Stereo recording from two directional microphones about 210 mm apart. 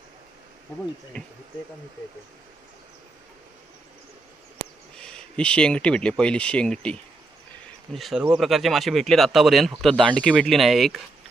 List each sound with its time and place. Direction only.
1.1 s speech: 5° left (ahead or behind)
4.9 s speech: 5° left (ahead or behind)
7.9 s speech: centre (ahead or behind)